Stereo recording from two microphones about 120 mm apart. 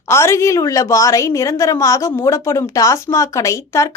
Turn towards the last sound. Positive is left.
turn(degrees=25)  # may be behind; listen again after turning